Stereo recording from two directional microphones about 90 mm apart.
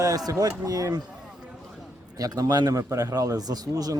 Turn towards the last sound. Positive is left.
turn(degrees=-45)  # may be behind; listen again after turning